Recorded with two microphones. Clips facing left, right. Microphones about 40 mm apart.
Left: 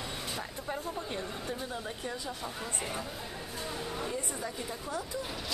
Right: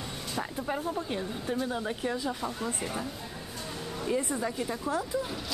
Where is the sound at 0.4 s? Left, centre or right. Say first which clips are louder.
Right 5 dB; centre.